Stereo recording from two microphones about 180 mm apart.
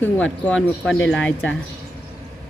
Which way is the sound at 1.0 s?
90° left.